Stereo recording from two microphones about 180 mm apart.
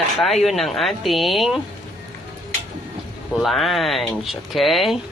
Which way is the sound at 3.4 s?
Centre (ahead or behind).